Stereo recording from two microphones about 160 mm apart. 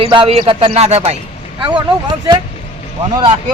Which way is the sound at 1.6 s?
30° right (ahead or behind).